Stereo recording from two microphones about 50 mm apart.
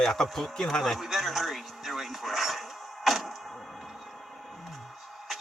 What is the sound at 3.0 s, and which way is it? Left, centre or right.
Vehicle, centre.